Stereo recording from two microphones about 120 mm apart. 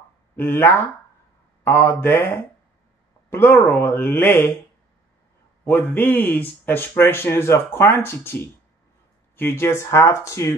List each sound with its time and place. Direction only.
0.4 s speech: 20° left (ahead or behind)
5.6 s speech: 15° left (ahead or behind)